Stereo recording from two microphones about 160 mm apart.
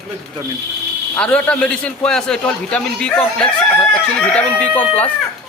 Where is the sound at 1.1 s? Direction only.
10° left (ahead or behind).